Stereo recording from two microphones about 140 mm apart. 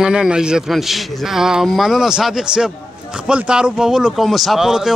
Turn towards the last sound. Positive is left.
turn(degrees=-5)  # may be behind; listen again after turning